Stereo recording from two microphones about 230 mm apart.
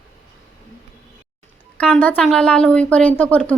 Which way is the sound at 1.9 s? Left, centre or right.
Centre.